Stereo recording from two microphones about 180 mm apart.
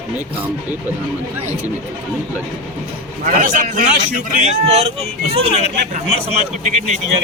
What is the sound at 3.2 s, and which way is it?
A man's voice, 45° right (ahead or behind).